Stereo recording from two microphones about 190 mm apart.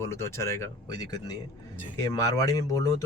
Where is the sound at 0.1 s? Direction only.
15° left (ahead or behind).